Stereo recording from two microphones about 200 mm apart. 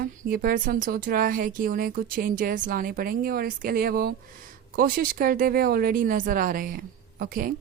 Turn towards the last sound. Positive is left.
turn(degrees=-45)  # may be behind; listen again after turning